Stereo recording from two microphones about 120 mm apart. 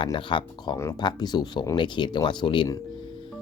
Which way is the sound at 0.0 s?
45° left (ahead or behind).